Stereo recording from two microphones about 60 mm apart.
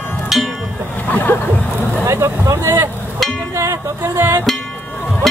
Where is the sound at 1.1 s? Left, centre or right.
Left.